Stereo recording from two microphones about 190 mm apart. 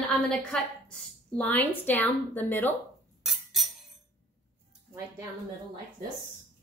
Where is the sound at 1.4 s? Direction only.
10° left (ahead or behind).